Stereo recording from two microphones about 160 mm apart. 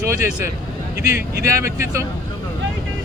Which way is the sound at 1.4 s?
20° right (ahead or behind).